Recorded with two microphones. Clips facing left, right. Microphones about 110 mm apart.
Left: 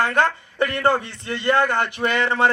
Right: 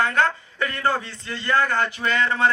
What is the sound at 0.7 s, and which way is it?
A man's voice, 20° left (ahead or behind).